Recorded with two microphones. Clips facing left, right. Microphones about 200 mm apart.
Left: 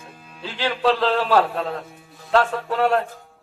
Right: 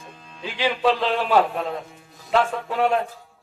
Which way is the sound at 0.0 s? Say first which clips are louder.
Even; 10° left (ahead or behind).